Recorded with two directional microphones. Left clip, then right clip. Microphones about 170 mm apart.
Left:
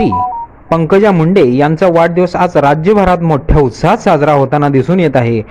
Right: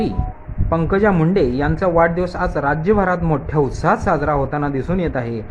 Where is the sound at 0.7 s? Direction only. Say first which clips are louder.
Left 8 dB; 30° left (ahead or behind).